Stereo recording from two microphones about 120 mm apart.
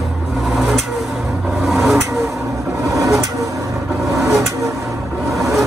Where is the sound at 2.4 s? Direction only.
25° right (ahead or behind).